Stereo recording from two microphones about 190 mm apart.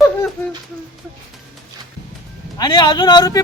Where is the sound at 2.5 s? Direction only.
25° left (ahead or behind).